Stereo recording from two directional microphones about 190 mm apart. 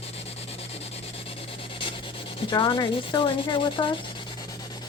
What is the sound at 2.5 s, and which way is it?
Speech, 25° left (ahead or behind).